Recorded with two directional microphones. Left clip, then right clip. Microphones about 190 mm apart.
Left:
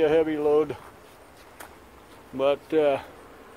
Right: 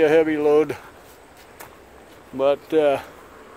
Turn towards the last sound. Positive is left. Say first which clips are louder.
# right 4 dB
turn(degrees=-15)  # may be behind; listen again after turning